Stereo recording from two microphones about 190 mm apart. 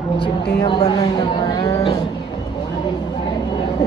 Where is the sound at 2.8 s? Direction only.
25° left (ahead or behind).